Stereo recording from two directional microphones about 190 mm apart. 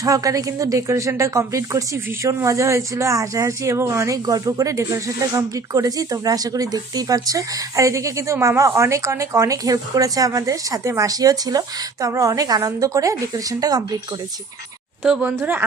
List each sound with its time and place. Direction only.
0.0 s a woman's voice: 20° right (ahead or behind)
15.0 s a woman's voice: 5° right (ahead or behind)